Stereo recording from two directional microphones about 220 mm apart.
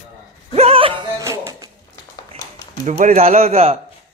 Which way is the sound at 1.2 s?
10° right (ahead or behind).